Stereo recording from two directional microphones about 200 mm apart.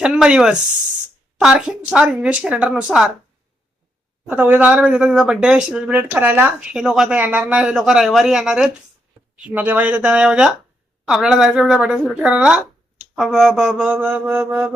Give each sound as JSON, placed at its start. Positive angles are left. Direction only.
{"t": 0.0, "sound": "speech", "side_deg": -5}
{"t": 4.3, "sound": "speech", "side_deg": -10}